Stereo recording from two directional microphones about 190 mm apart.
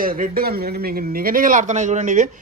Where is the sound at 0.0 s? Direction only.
50° right (ahead or behind).